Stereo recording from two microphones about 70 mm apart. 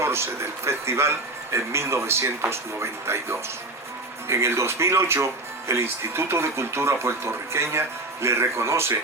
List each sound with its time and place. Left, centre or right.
0.0 s speech: right